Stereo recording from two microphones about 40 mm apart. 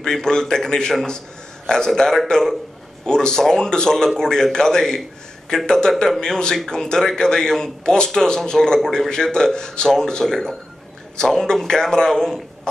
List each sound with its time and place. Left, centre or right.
0.0 s speech: centre